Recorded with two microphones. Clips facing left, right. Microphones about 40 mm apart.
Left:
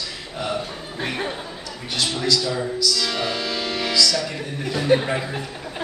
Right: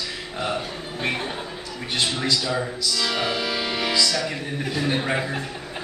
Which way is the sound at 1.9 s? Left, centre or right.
Right.